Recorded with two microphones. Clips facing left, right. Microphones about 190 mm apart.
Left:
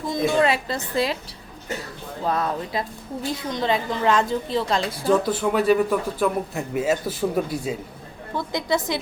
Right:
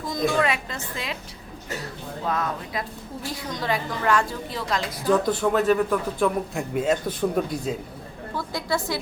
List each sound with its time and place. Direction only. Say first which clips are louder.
0.3 s a woman's voice: left 4 dB; 30° left (ahead or behind)
2.2 s a woman's voice: left 3 dB; 35° left (ahead or behind)
3.5 s a woman's voice: left 3 dB; 25° left (ahead or behind)
5.1 s a man's voice: even; 5° left (ahead or behind)
8.4 s a woman's voice: left 3 dB; 20° left (ahead or behind)